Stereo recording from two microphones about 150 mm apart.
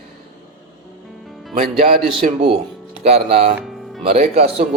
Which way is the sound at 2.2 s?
60° right (ahead or behind).